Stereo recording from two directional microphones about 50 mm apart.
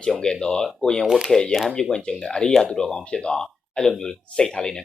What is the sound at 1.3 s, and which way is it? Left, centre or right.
Speech, centre.